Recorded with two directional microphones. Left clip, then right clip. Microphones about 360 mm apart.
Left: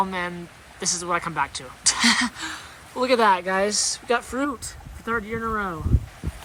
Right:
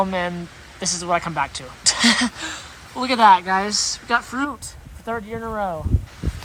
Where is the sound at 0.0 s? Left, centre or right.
Centre.